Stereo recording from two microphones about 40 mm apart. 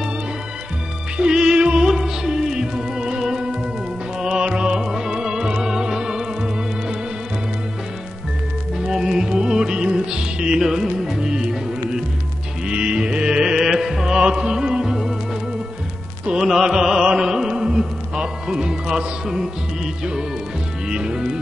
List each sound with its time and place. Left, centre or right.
1.1 s music: right
8.7 s music: centre
16.3 s music: centre